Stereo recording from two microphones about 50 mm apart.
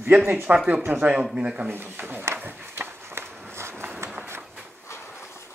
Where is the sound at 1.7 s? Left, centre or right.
Right.